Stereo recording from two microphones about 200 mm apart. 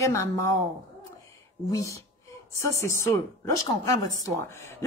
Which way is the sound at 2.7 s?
15° left (ahead or behind).